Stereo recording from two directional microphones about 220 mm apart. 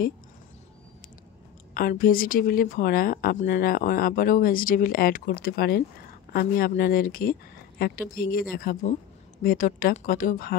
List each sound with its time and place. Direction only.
1.7 s speech: 40° left (ahead or behind)